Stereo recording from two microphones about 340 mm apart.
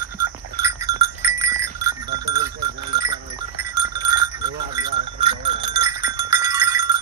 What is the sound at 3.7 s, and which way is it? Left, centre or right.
Sheep, centre.